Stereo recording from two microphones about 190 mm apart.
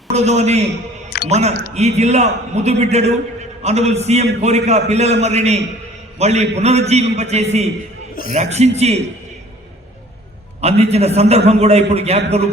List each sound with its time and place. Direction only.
0.1 s a man's voice: 35° right (ahead or behind)
10.6 s a man's voice: 35° right (ahead or behind)